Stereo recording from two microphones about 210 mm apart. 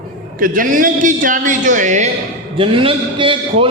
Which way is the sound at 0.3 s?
40° right (ahead or behind).